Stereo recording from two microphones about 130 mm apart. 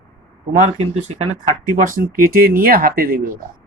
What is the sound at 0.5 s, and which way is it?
Speech, 55° right (ahead or behind).